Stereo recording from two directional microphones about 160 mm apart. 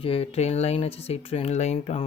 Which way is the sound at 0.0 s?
35° left (ahead or behind).